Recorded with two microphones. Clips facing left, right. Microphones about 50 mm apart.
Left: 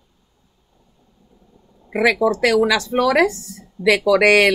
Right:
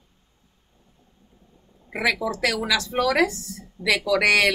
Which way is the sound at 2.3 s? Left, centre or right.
Left.